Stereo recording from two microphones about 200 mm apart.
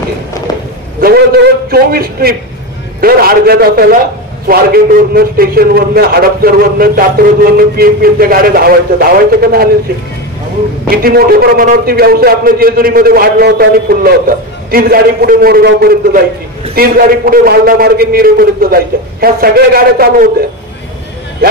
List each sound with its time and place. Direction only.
1.0 s a man's voice: 50° right (ahead or behind)
10.9 s a man's voice: 50° right (ahead or behind)